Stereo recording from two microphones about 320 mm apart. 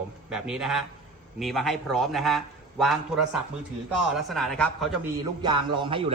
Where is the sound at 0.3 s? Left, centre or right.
Centre.